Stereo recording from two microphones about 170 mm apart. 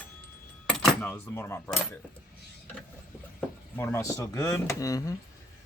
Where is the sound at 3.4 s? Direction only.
10° left (ahead or behind).